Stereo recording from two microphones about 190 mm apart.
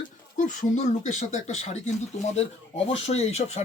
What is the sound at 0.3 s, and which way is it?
Speech, 40° left (ahead or behind).